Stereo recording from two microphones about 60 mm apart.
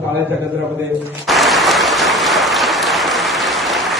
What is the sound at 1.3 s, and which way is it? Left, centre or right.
Applause, centre.